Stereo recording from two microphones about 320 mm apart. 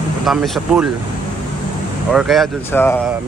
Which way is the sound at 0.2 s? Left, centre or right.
Centre.